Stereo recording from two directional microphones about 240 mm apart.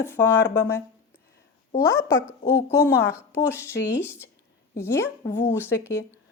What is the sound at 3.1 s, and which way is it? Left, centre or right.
Speech, centre.